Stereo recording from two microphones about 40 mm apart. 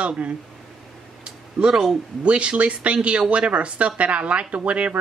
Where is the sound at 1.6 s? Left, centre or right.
Centre.